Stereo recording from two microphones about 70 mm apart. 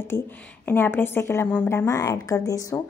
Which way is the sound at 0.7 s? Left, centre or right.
Left.